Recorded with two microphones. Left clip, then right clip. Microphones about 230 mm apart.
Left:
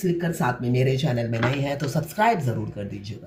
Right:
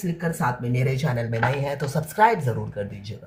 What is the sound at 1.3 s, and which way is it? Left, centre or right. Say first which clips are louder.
Speech: right 1 dB; right.